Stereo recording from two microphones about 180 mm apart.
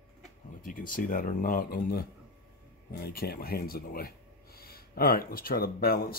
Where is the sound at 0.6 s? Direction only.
50° left (ahead or behind).